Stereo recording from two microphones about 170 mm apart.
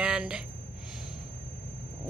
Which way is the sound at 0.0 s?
5° right (ahead or behind).